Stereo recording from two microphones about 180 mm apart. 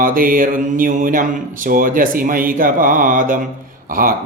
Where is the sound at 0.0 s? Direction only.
50° right (ahead or behind).